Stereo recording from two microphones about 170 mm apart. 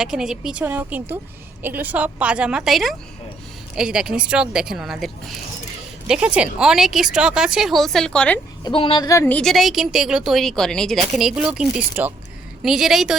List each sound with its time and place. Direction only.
0.0 s a woman's voice: 5° right (ahead or behind)
8.6 s speech: 30° left (ahead or behind)
9.0 s a woman's voice: 15° left (ahead or behind); by 13.1 s centre (ahead or behind)